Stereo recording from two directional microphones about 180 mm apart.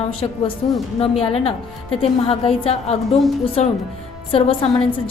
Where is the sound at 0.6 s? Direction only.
35° left (ahead or behind).